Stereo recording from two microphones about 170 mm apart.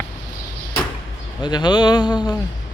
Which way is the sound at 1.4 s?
25° left (ahead or behind).